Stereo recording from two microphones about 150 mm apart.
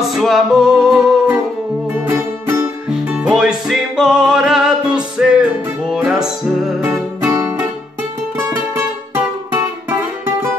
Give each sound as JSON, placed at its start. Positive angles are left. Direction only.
{"t": 0.1, "sound": "music", "side_deg": 0}
{"t": 2.0, "sound": "music", "side_deg": -15}
{"t": 7.2, "sound": "music", "side_deg": -15}